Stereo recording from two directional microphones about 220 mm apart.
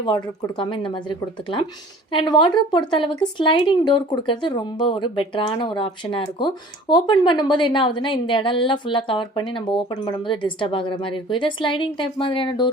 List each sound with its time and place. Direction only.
0.0 s speech: 20° left (ahead or behind)
2.1 s speech: 20° left (ahead or behind)